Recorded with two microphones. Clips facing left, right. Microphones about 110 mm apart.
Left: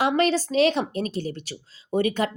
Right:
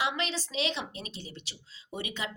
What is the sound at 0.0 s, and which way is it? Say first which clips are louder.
Speech: left 11 dB; 50° left (ahead or behind).